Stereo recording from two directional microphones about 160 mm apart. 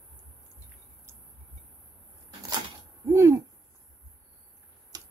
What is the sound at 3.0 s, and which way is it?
Hoot, 15° right (ahead or behind).